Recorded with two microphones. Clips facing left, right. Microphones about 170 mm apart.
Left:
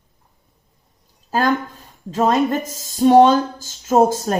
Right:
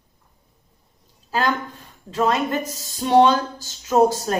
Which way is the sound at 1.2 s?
45° left (ahead or behind).